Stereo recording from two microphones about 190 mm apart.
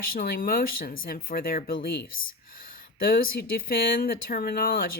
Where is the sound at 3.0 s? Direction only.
50° left (ahead or behind).